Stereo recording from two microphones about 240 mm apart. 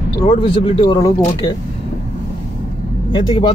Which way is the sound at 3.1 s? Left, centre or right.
Centre.